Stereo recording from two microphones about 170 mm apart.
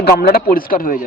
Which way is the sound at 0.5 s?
55° left (ahead or behind).